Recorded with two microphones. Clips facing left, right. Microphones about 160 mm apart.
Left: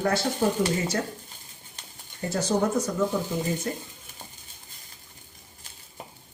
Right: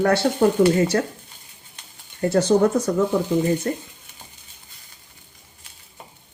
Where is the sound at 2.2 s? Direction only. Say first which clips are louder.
Right 9 dB; 65° right (ahead or behind).